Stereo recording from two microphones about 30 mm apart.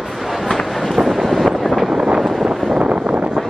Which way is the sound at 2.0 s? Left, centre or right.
Right.